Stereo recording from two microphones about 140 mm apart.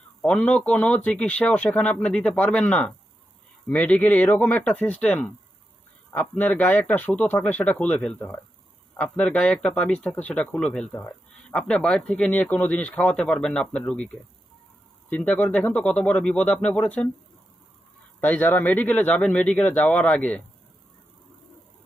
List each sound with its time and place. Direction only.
0.2 s speech: 5° left (ahead or behind)
18.2 s speech: 10° left (ahead or behind)